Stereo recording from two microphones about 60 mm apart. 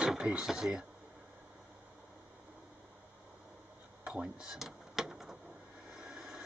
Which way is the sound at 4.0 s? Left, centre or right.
Centre.